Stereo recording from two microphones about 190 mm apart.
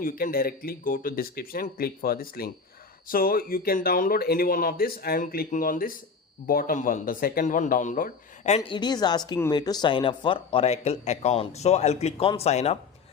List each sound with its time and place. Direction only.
0.0 s speech: 50° left (ahead or behind)
8.5 s speech: 25° left (ahead or behind)